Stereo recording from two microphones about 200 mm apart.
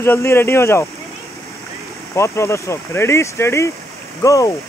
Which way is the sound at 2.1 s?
15° left (ahead or behind).